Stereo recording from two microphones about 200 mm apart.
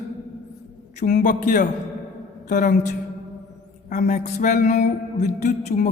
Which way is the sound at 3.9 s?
40° left (ahead or behind).